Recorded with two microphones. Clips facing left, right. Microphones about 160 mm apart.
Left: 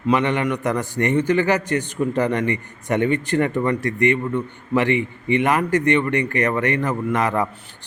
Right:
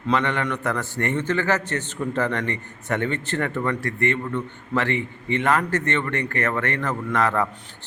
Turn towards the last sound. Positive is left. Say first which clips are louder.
# left 2 dB
turn(degrees=15)  # may be behind; listen again after turning